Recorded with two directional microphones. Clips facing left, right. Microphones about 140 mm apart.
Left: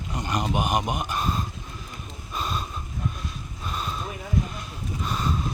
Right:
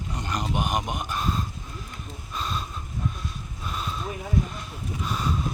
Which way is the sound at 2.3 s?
10° left (ahead or behind).